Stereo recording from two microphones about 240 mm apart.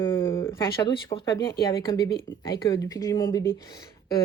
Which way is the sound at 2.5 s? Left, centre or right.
Centre.